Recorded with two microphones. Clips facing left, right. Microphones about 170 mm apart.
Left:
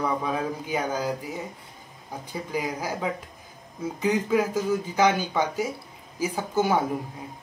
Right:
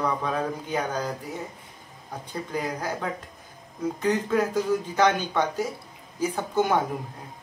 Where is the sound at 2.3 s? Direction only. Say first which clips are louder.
Even; 10° left (ahead or behind).